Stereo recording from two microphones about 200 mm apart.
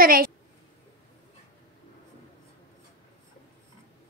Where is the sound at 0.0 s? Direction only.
45° right (ahead or behind).